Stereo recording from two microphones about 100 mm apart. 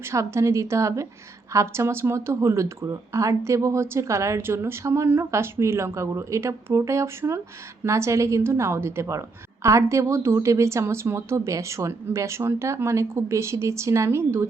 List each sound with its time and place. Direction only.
0.0 s a woman's voice: 30° right (ahead or behind)